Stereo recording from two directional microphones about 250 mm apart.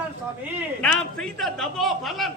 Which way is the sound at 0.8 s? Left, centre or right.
Centre.